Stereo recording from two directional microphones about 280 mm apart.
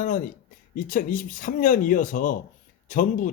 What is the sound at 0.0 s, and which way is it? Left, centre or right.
Speech, left.